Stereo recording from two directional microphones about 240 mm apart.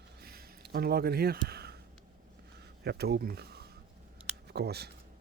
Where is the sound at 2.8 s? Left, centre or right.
Right.